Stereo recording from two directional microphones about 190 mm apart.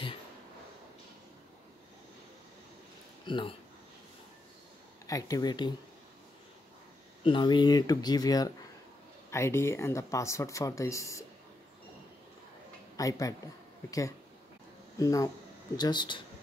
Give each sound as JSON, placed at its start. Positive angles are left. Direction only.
{"t": 3.3, "sound": "speech", "side_deg": 25}
{"t": 5.0, "sound": "speech", "side_deg": 20}
{"t": 7.2, "sound": "speech", "side_deg": 25}
{"t": 12.9, "sound": "speech", "side_deg": 20}